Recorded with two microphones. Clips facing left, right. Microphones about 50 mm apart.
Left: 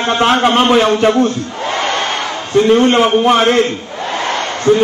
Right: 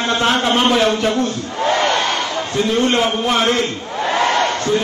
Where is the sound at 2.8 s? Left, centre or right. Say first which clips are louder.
Left 6 dB; left.